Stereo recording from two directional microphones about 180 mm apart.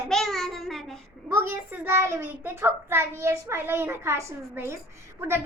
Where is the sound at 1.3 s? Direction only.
10° right (ahead or behind).